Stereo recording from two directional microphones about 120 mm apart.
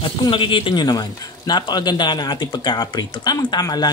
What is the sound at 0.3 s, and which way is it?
A man's voice, 45° left (ahead or behind).